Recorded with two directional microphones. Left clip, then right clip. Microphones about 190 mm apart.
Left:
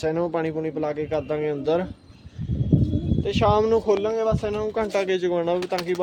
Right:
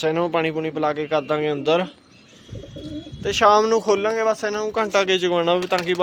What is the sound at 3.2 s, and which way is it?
Speech, centre (ahead or behind).